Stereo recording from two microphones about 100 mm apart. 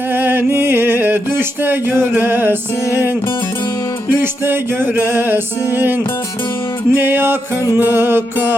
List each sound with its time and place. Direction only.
0.1 s music: 20° right (ahead or behind)
4.2 s music: 20° right (ahead or behind)